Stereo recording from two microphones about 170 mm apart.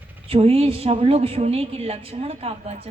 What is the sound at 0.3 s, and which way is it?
A woman's voice, 35° right (ahead or behind).